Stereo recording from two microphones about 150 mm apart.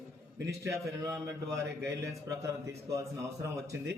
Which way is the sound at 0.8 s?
20° right (ahead or behind).